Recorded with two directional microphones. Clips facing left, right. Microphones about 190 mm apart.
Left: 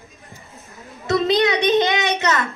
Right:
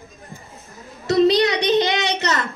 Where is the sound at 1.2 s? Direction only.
50° left (ahead or behind).